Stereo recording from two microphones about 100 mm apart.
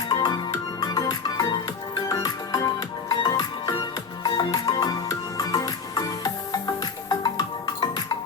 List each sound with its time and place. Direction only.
0.1 s music: 40° left (ahead or behind)